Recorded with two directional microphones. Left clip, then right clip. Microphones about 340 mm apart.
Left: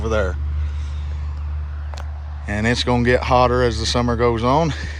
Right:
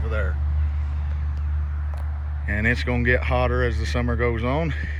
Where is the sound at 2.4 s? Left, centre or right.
Centre.